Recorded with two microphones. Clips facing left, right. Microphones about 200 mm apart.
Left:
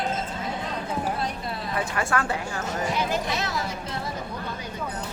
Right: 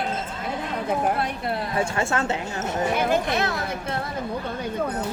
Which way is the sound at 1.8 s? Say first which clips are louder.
Right 1 dB; 25° right (ahead or behind).